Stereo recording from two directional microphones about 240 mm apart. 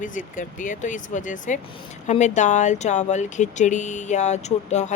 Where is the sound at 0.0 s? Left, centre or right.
Left.